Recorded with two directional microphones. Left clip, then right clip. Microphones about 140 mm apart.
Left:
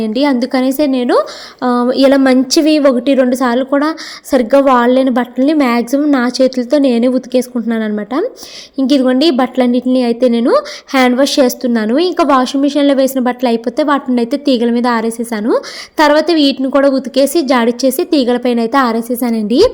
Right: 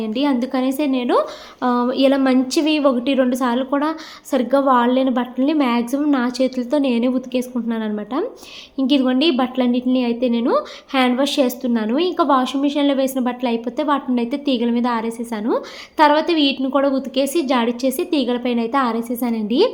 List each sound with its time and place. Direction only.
0.0 s a woman's voice: 50° left (ahead or behind)